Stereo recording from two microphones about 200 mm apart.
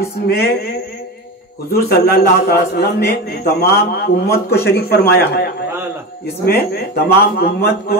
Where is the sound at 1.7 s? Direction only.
50° left (ahead or behind).